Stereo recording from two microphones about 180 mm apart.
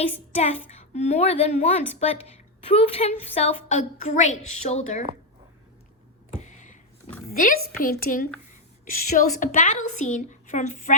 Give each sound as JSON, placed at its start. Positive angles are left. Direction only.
{"t": 0.3, "sound": "a woman's voice", "side_deg": 35}
{"t": 6.3, "sound": "a sound", "side_deg": 45}
{"t": 7.3, "sound": "a woman's voice", "side_deg": 50}